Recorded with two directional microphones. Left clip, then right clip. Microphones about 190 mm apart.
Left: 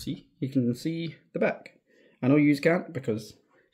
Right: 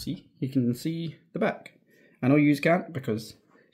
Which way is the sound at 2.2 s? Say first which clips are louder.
Even; 5° left (ahead or behind).